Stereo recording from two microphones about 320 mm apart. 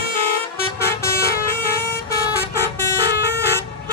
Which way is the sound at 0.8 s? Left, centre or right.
Centre.